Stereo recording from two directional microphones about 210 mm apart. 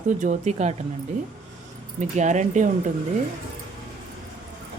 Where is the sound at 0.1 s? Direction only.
35° right (ahead or behind).